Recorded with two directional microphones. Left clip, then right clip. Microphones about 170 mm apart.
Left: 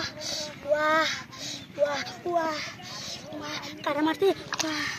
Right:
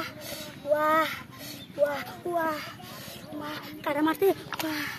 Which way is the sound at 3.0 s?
35° right (ahead or behind).